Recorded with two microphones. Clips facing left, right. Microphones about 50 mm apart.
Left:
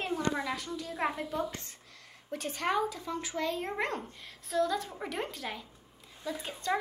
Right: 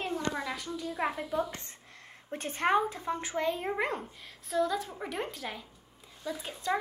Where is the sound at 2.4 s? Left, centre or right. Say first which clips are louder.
Right 3 dB; right.